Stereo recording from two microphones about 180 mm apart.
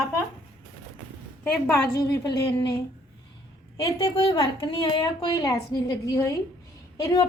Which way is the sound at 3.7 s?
20° left (ahead or behind).